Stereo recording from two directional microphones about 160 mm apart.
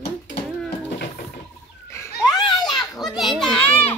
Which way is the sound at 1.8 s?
15° left (ahead or behind).